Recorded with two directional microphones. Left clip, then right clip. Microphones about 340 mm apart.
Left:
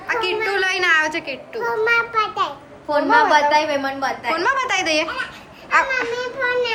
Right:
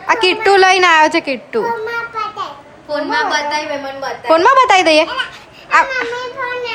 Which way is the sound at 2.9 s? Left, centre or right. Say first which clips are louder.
Left 2 dB; centre.